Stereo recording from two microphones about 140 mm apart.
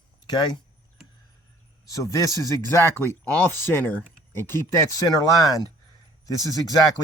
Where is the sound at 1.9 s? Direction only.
25° left (ahead or behind).